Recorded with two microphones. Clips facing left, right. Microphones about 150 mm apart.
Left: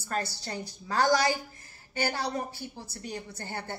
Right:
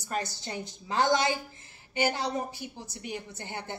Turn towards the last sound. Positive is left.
turn(degrees=-20)  # may be behind; listen again after turning